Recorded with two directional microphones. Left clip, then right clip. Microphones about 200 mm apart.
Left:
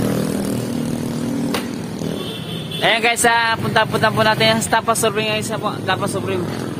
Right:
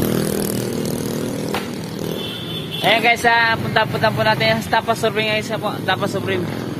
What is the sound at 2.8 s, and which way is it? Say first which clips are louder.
Vehicle: right 1 dB; 35° left (ahead or behind).